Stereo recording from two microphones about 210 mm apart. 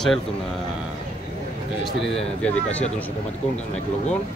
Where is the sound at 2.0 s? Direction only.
5° left (ahead or behind).